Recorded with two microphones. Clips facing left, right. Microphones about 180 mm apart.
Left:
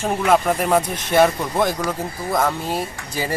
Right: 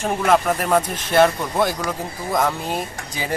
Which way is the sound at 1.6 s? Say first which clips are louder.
Left 1 dB; centre (ahead or behind).